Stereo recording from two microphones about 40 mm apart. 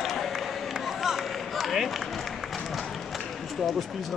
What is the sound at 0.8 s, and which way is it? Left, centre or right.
Run, centre.